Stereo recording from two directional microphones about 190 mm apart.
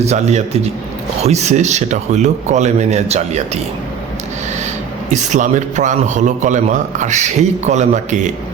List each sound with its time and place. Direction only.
0.0 s a man's voice: 35° right (ahead or behind)
5.1 s a man's voice: 40° right (ahead or behind)